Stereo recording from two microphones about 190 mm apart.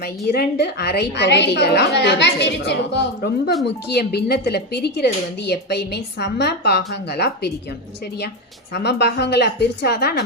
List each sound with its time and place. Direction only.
0.3 s speech: 60° left (ahead or behind)
8.7 s speech: 60° left (ahead or behind)